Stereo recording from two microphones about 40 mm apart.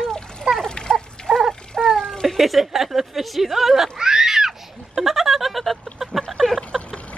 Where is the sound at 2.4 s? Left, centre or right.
Centre.